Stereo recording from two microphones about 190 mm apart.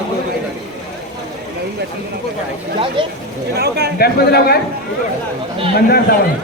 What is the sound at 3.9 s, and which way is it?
Speech, 55° left (ahead or behind).